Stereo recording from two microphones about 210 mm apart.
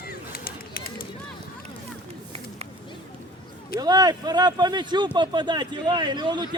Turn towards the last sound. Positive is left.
turn(degrees=-20)  # may be behind; listen again after turning